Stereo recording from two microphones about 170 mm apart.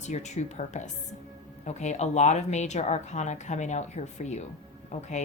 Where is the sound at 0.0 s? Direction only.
45° left (ahead or behind).